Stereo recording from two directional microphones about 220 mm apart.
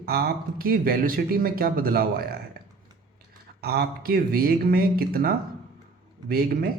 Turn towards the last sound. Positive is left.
turn(degrees=-45)  # may be behind; listen again after turning